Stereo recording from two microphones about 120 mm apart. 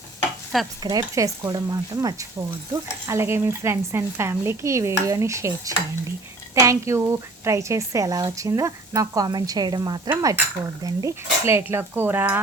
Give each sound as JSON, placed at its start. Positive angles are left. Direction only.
{"t": 0.8, "sound": "speech", "side_deg": -35}